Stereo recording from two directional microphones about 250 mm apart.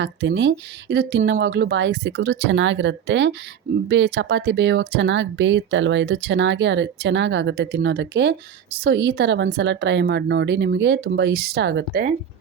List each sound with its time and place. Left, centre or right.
0.0 s speech: right